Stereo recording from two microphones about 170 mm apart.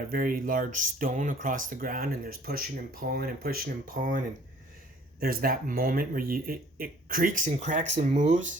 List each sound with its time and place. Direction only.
0.1 s speech: 55° right (ahead or behind)
5.2 s speech: 60° right (ahead or behind); by 8.4 s 45° right (ahead or behind)